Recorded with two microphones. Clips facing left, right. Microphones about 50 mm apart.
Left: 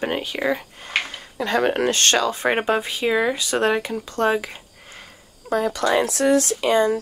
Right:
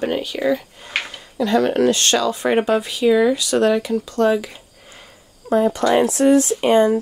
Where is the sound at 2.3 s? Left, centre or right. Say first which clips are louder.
Right 3 dB; left.